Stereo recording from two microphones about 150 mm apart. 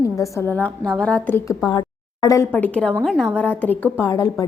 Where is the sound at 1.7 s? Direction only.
25° left (ahead or behind).